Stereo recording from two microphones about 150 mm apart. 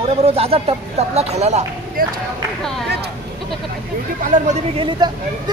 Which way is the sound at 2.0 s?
75° right (ahead or behind).